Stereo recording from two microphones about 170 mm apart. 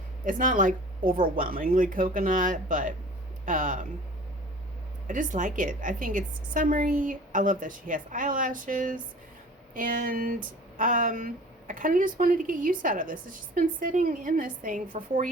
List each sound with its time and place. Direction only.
0.3 s a woman's voice: 50° right (ahead or behind)
5.0 s a woman's voice: 50° right (ahead or behind)